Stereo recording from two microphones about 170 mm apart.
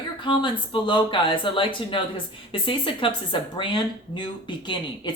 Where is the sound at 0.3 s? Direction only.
30° left (ahead or behind).